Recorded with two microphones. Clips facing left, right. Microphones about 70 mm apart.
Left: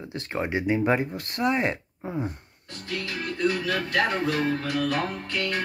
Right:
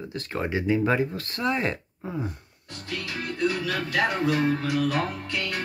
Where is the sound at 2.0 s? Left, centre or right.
Left.